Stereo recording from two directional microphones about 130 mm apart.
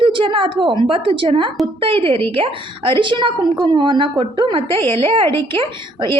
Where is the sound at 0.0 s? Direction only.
40° right (ahead or behind).